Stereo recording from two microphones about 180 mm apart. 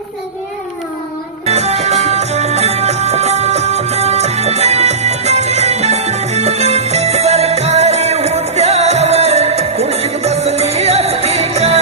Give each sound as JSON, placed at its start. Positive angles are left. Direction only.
{"t": 1.5, "sound": "music", "side_deg": -35}